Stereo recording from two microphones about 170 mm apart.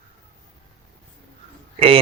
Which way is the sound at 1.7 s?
35° right (ahead or behind).